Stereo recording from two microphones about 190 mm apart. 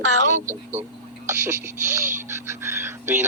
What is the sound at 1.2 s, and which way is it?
Speech, 15° right (ahead or behind).